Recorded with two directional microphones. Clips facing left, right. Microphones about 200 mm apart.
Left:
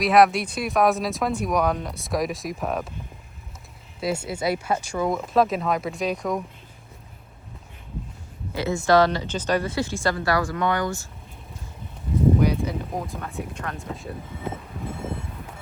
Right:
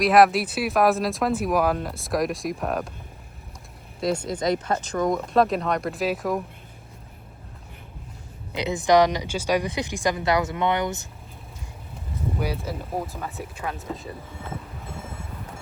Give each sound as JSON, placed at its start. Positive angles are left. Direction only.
{"t": 0.0, "sound": "speech", "side_deg": 0}
{"t": 4.0, "sound": "speech", "side_deg": 10}
{"t": 8.5, "sound": "speech", "side_deg": -15}
{"t": 12.4, "sound": "speech", "side_deg": -5}